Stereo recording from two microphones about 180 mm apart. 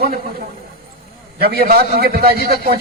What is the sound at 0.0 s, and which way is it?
A man's voice, 55° right (ahead or behind).